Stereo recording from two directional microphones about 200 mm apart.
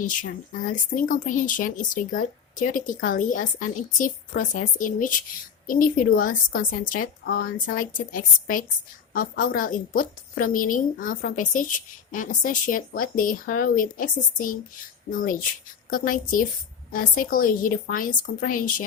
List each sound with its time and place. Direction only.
0.0 s speech: 40° left (ahead or behind)